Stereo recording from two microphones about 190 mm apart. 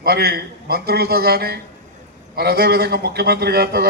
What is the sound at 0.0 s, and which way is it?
A man's voice, 55° right (ahead or behind).